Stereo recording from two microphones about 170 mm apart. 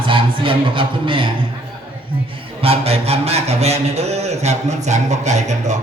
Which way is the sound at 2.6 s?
35° right (ahead or behind).